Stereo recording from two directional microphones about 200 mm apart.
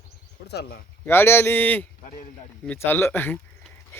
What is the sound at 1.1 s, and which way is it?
A man's voice, 10° left (ahead or behind).